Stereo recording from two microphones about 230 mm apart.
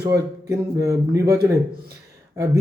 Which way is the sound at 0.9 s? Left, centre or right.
Centre.